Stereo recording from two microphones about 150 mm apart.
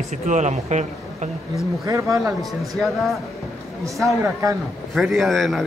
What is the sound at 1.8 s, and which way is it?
Speech, 20° right (ahead or behind).